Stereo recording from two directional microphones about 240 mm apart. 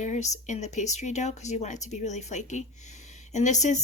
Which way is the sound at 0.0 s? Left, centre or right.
Left.